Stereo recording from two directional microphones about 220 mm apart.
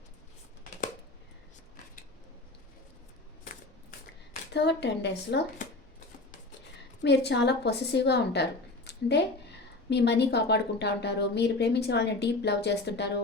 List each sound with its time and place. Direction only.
4.5 s a woman's voice: 50° left (ahead or behind)
7.0 s a woman's voice: 50° left (ahead or behind)